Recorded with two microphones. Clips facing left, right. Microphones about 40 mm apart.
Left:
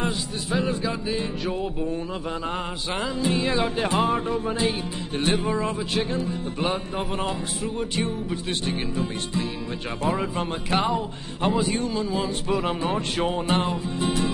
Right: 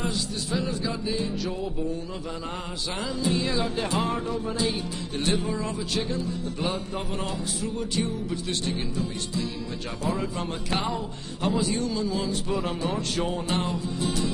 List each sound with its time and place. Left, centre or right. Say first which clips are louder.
0.0 s music: left 2 dB; left
2.9 s music: left 2 dB; left